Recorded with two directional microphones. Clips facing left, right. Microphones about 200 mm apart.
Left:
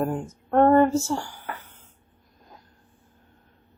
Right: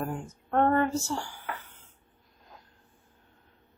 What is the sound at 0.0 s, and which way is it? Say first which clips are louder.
Speech: left 7 dB; 40° left (ahead or behind).